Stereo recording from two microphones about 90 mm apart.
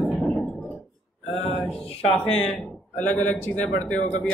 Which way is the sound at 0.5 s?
20° left (ahead or behind).